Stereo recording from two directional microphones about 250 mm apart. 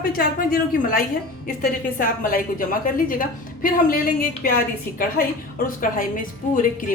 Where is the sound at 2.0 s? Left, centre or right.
Left.